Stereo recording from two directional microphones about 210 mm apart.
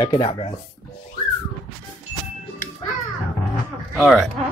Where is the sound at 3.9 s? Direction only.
Centre (ahead or behind).